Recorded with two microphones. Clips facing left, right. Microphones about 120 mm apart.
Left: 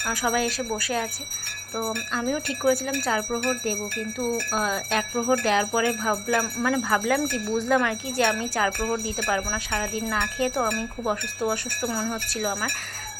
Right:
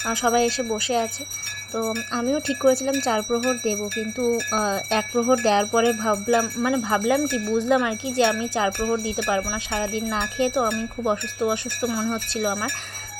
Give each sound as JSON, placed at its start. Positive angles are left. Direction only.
{"t": 0.1, "sound": "speech", "side_deg": -25}
{"t": 2.1, "sound": "speech", "side_deg": -30}